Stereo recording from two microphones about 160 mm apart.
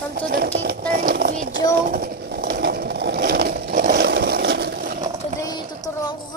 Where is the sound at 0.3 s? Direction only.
70° right (ahead or behind).